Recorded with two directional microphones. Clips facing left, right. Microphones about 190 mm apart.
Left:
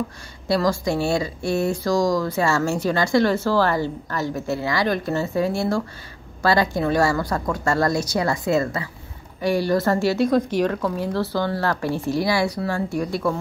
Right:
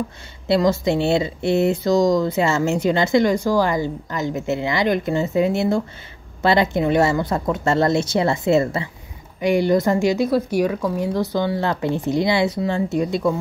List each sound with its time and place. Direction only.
0.5 s speech: 20° right (ahead or behind)